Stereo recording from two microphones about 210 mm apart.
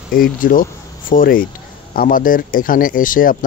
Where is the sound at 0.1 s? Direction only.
45° left (ahead or behind).